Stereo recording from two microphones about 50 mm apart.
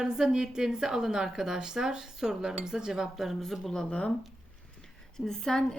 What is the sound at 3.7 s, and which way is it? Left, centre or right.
Speech, centre.